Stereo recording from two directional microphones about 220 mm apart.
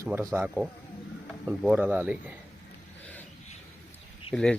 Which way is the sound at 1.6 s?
5° right (ahead or behind).